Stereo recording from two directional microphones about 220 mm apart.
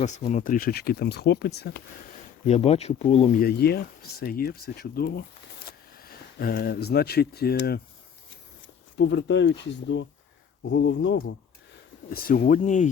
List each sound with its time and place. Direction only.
0.0 s speech: 30° left (ahead or behind); by 1.8 s 50° left (ahead or behind)
2.5 s speech: 30° left (ahead or behind)
3.4 s speech: 45° left (ahead or behind)
12.0 s speech: 40° left (ahead or behind)